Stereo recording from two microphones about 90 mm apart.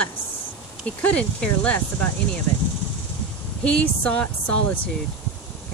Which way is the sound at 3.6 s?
10° left (ahead or behind).